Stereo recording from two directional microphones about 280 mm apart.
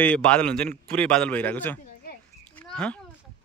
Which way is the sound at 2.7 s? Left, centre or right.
Centre.